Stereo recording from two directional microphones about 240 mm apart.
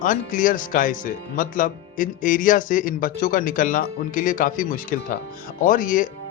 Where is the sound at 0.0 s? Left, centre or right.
Left.